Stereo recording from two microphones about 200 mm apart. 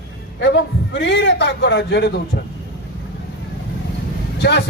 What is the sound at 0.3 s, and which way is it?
A man's voice, 60° left (ahead or behind).